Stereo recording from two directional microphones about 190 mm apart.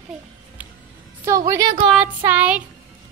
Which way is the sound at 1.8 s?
5° right (ahead or behind).